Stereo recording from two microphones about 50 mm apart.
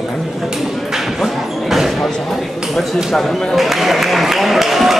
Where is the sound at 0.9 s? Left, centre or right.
Centre.